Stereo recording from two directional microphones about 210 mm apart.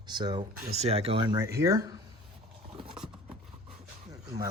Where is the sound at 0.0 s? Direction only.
20° right (ahead or behind).